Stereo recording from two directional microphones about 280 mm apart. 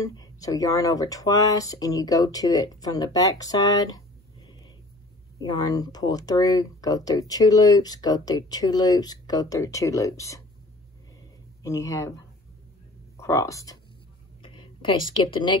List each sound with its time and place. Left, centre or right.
0.0 s speech: centre
5.4 s speech: centre
11.6 s speech: centre
13.2 s speech: centre